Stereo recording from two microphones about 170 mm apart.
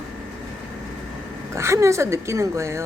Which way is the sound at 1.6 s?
15° right (ahead or behind).